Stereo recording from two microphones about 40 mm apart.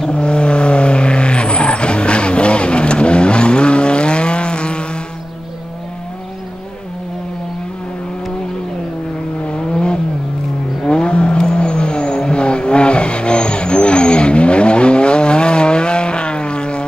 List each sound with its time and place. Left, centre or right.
0.1 s vehicle: left
9.7 s vehicle: left